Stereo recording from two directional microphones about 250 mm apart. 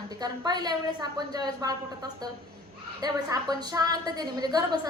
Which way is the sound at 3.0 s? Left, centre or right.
Centre.